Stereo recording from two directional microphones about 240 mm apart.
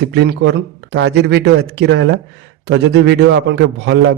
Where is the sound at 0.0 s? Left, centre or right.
Right.